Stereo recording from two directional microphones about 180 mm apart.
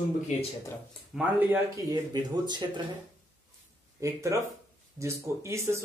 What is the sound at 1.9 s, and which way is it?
Speech, 25° right (ahead or behind).